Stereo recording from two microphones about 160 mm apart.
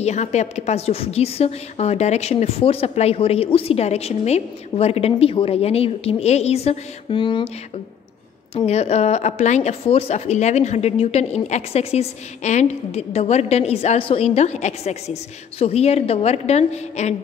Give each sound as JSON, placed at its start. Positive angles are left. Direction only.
{"t": 0.0, "sound": "a woman's voice", "side_deg": 45}
{"t": 8.5, "sound": "a woman's voice", "side_deg": 40}